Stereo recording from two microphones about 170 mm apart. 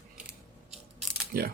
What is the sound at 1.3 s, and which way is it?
Speech, 65° right (ahead or behind).